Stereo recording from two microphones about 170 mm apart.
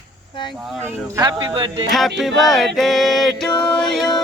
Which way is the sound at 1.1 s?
20° right (ahead or behind).